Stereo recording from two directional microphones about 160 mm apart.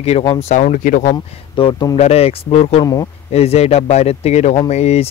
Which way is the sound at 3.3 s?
40° left (ahead or behind).